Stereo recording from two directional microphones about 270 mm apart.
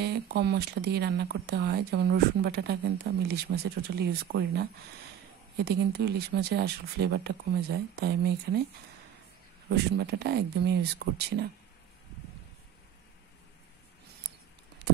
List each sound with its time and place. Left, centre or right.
0.0 s speech: right
5.7 s speech: right
9.8 s speech: right